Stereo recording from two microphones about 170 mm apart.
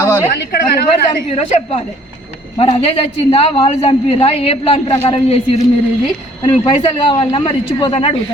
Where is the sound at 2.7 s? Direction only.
35° left (ahead or behind).